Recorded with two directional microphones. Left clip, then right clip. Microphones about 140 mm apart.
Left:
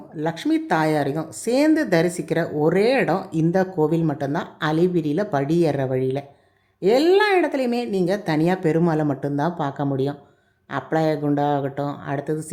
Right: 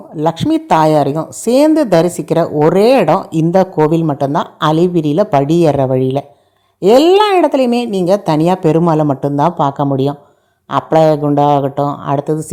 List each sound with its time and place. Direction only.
0.2 s a woman's voice: 45° right (ahead or behind)